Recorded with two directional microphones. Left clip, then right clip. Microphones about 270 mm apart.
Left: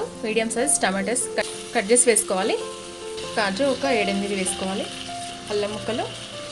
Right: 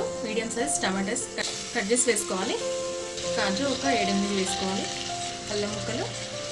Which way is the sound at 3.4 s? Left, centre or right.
Left.